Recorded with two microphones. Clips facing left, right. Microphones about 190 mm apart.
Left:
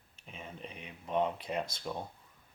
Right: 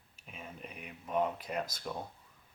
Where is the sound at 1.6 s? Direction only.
25° left (ahead or behind).